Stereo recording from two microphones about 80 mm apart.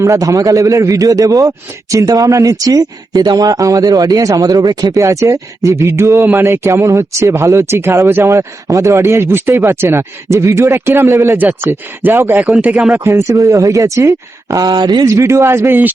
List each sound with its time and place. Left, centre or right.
0.0 s a man's voice: right
5.3 s speech: right
9.0 s speech: right
12.4 s speech: centre
13.1 s speech: right
14.6 s speech: right
15.0 s speech: right